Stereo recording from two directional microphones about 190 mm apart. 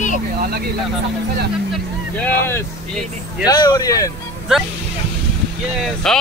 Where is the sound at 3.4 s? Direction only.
20° left (ahead or behind).